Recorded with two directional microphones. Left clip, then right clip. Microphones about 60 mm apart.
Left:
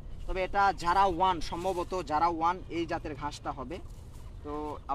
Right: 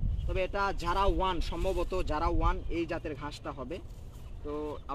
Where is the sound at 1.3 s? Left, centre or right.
Left.